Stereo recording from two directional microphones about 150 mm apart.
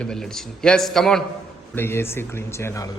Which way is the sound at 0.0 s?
5° left (ahead or behind).